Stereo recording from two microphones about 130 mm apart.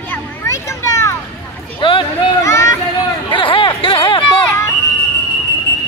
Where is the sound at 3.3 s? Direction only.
40° left (ahead or behind).